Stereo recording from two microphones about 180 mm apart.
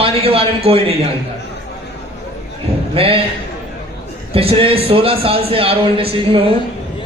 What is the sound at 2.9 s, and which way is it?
Speech, 30° right (ahead or behind).